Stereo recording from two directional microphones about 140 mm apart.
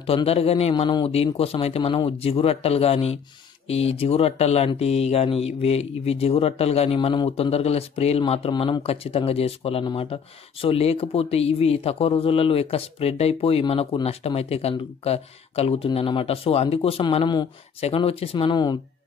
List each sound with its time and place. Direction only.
0.0 s speech: 40° left (ahead or behind)